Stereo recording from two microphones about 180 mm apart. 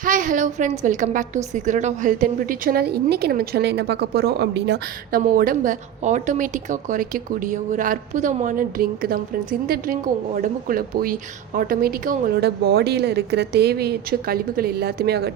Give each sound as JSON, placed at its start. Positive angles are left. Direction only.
{"t": 0.0, "sound": "a woman's voice", "side_deg": -45}